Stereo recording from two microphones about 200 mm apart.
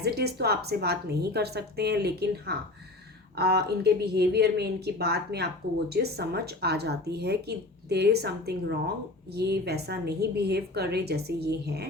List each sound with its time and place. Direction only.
0.0 s speech: 55° right (ahead or behind)